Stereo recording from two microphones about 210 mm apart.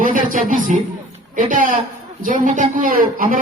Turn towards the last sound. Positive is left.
turn(degrees=-40)  # may be behind; listen again after turning